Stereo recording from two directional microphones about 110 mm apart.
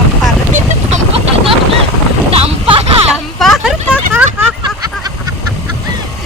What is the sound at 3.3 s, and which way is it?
Vehicle, centre (ahead or behind).